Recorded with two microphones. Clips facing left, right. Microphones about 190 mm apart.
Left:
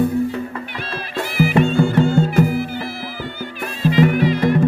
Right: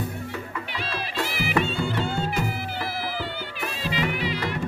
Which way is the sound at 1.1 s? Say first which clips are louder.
Left 9 dB; 50° left (ahead or behind).